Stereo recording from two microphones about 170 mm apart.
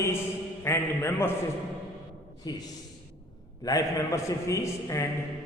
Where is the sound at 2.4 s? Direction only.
25° left (ahead or behind).